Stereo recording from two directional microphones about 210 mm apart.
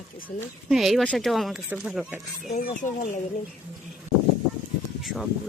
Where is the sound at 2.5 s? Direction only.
40° left (ahead or behind).